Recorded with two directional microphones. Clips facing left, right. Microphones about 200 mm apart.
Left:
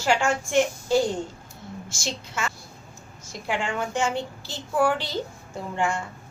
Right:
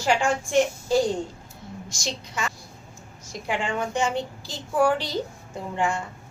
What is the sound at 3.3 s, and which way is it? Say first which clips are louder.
A child's voice: right 1 dB; 15° right (ahead or behind).